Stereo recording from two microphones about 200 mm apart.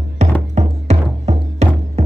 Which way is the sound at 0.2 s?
35° right (ahead or behind).